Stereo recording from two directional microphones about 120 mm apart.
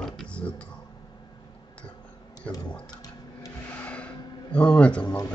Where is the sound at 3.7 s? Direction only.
10° left (ahead or behind).